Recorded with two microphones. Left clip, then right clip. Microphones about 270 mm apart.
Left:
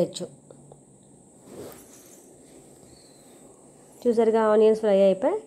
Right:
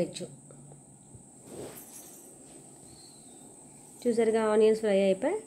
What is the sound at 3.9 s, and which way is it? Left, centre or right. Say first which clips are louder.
Speech: left 6 dB; centre.